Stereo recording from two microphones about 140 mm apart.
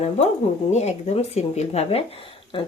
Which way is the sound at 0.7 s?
50° left (ahead or behind).